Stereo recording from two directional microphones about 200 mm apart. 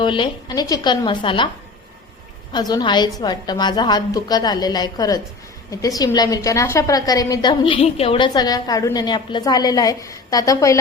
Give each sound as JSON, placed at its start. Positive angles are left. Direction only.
{"t": 0.0, "sound": "a woman's voice", "side_deg": 25}
{"t": 2.5, "sound": "a woman's voice", "side_deg": 20}